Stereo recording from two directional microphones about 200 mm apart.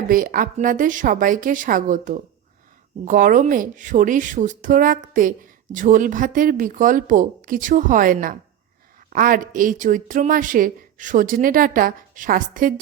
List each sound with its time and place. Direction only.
0.1 s a woman's voice: 45° right (ahead or behind)